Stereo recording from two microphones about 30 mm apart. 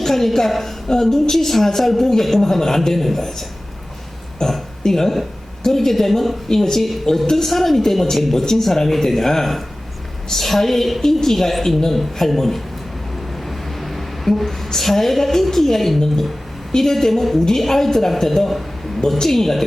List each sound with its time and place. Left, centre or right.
0.0 s a man's voice: centre
13.3 s a sound: centre
15.5 s a man's voice: centre